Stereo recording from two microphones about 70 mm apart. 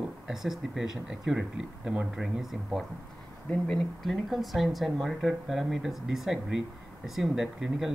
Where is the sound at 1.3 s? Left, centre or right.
Right.